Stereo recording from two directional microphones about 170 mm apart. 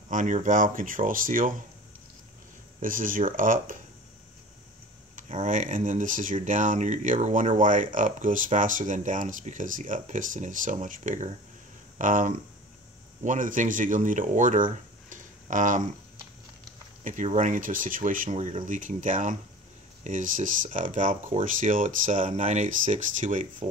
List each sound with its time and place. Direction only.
0.1 s speech: 50° right (ahead or behind)
2.8 s speech: 55° right (ahead or behind)
5.1 s speech: 45° right (ahead or behind)
17.0 s speech: 45° right (ahead or behind)